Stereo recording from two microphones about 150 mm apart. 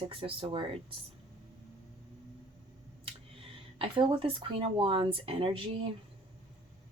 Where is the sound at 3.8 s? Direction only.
35° right (ahead or behind).